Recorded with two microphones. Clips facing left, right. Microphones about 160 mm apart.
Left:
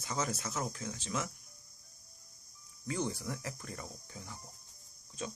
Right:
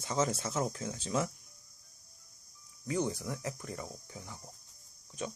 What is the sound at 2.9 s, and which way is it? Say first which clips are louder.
Speech: right 3 dB; 15° right (ahead or behind).